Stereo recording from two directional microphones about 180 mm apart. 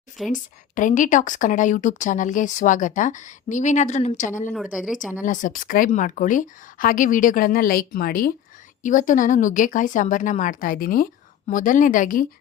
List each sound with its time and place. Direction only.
0.2 s speech: centre (ahead or behind)
0.8 s speech: 45° left (ahead or behind)
4.5 s speech: centre (ahead or behind)
5.2 s speech: 45° left (ahead or behind)